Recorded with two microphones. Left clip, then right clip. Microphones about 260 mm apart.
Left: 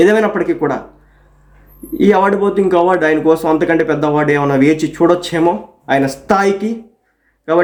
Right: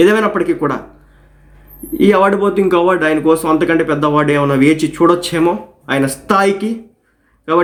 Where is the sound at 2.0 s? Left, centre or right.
Centre.